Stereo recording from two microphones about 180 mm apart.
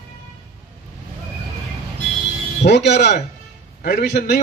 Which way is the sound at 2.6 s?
70° left (ahead or behind).